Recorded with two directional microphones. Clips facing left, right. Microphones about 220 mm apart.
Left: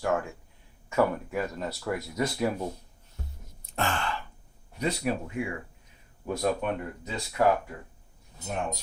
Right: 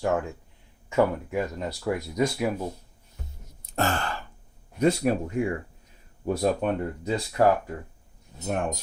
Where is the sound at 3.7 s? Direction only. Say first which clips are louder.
Right 3 dB; 40° right (ahead or behind).